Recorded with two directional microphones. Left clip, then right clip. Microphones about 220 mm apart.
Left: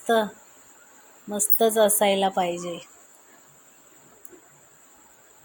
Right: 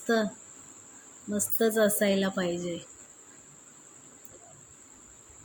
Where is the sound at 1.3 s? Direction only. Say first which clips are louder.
Left 5 dB; 55° left (ahead or behind).